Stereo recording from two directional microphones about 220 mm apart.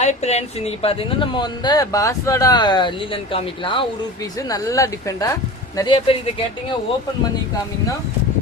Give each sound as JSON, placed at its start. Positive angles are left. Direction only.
{"t": 0.0, "sound": "speech", "side_deg": 30}